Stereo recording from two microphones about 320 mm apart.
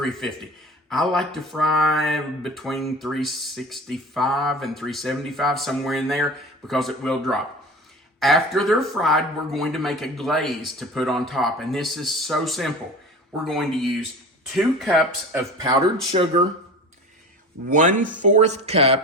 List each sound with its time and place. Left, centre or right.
0.0 s a man's voice: centre
15.5 s speech: centre
17.7 s speech: right